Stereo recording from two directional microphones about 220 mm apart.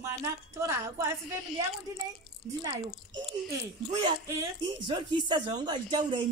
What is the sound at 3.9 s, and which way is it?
Speech, 15° right (ahead or behind).